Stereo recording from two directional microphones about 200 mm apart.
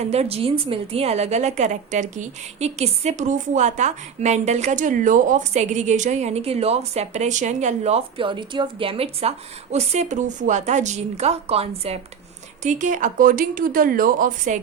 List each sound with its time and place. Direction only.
0.0 s a woman's voice: 30° right (ahead or behind)